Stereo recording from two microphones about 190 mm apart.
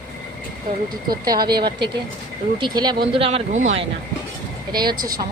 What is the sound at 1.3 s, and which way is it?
Speech, 55° right (ahead or behind).